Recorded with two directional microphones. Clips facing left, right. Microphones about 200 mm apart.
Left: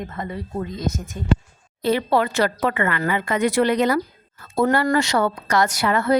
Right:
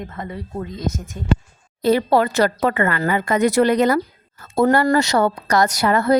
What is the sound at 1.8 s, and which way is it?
Speech, 40° right (ahead or behind).